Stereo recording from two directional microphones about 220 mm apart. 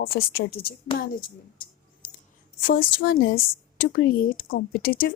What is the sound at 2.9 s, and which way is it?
Speech, 50° left (ahead or behind).